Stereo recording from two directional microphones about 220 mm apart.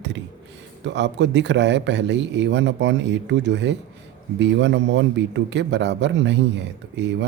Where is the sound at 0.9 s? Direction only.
55° right (ahead or behind).